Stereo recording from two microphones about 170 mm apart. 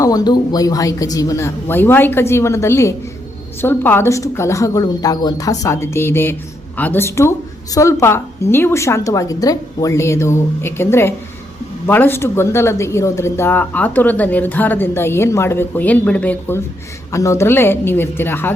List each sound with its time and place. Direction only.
0.0 s speech: 20° left (ahead or behind)